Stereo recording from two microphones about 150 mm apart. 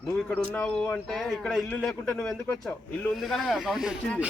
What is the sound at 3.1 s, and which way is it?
Speech, centre (ahead or behind).